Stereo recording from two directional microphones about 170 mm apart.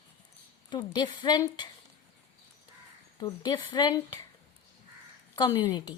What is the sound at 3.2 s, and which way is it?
A woman's voice, 25° left (ahead or behind).